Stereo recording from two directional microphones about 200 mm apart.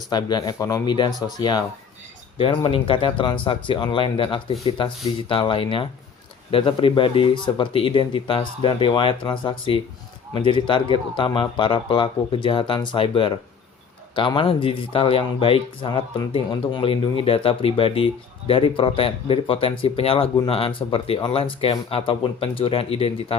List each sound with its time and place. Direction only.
0.1 s speech: 20° left (ahead or behind)
2.6 s speech: 25° left (ahead or behind)